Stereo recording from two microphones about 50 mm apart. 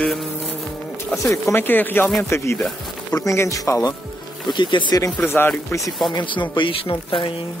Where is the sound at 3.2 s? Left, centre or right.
Left.